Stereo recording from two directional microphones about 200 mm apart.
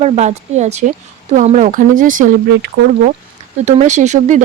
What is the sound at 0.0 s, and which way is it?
Speech, 35° right (ahead or behind).